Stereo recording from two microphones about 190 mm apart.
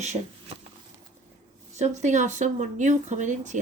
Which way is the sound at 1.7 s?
35° right (ahead or behind).